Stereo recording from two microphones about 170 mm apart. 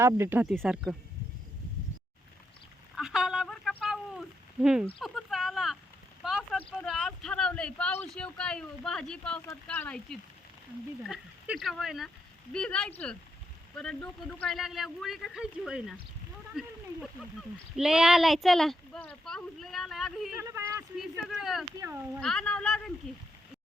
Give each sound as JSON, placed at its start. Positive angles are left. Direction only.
{"t": 0.0, "sound": "speech", "side_deg": -15}
{"t": 0.5, "sound": "speech", "side_deg": 0}
{"t": 2.9, "sound": "a sound", "side_deg": 0}
{"t": 6.2, "sound": "speech", "side_deg": 0}
{"t": 11.4, "sound": "speech", "side_deg": 0}
{"t": 17.7, "sound": "speech", "side_deg": -5}
{"t": 20.4, "sound": "speech", "side_deg": -15}
{"t": 21.0, "sound": "speech", "side_deg": 0}
{"t": 21.8, "sound": "speech", "side_deg": -15}
{"t": 22.2, "sound": "speech", "side_deg": 5}